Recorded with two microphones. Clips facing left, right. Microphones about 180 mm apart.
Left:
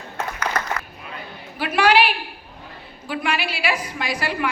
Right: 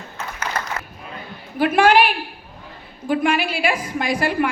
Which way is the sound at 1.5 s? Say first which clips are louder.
Right 3 dB; 50° right (ahead or behind).